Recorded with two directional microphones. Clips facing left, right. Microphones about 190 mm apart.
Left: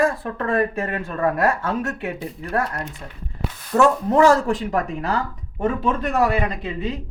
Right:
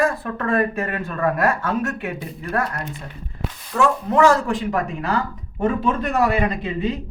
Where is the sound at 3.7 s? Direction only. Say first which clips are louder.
Left 2 dB; 40° left (ahead or behind).